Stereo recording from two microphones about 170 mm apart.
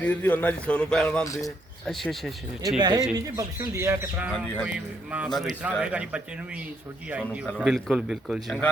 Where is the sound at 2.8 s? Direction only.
25° right (ahead or behind).